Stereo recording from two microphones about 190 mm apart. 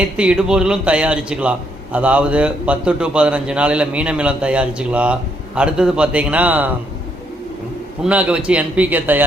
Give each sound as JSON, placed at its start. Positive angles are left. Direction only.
{"t": 0.2, "sound": "a man's voice", "side_deg": -5}
{"t": 8.0, "sound": "a man's voice", "side_deg": -5}